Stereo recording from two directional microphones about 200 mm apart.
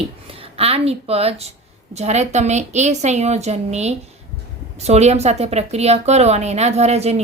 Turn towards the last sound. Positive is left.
turn(degrees=-30)  # may be behind; listen again after turning